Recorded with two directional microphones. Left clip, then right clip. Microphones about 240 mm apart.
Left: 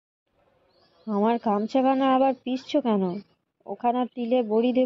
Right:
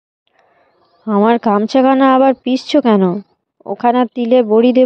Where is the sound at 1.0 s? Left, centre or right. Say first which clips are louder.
Right 12 dB; right.